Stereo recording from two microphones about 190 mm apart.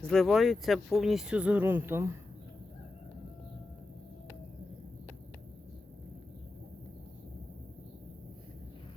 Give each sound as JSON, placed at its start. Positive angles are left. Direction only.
{"t": 0.0, "sound": "speech", "side_deg": 0}